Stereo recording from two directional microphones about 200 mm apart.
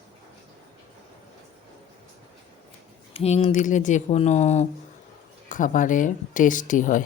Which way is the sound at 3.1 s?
30° left (ahead or behind).